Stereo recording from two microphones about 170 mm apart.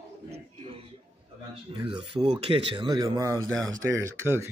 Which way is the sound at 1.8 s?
30° right (ahead or behind).